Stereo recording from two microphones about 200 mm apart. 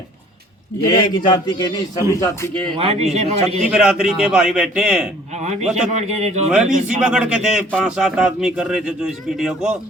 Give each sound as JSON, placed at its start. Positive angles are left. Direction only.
{"t": 0.9, "sound": "a man's voice", "side_deg": 20}
{"t": 2.7, "sound": "a man's voice", "side_deg": -30}
{"t": 3.6, "sound": "a man's voice", "side_deg": -5}
{"t": 5.4, "sound": "a man's voice", "side_deg": -35}
{"t": 6.5, "sound": "a man's voice", "side_deg": -5}